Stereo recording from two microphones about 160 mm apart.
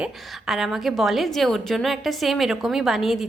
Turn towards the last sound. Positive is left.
turn(degrees=0)  # may be behind; listen again after turning